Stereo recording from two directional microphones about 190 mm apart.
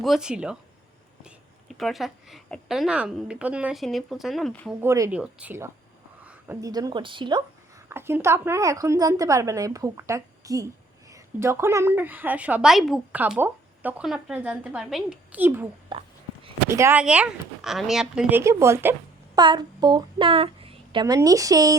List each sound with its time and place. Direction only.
0.0 s a woman's voice: centre (ahead or behind)
4.8 s a woman's voice: 15° right (ahead or behind)
7.9 s a woman's voice: 10° right (ahead or behind)
15.9 s a sound: 30° right (ahead or behind)
16.6 s a woman's voice: 15° right (ahead or behind)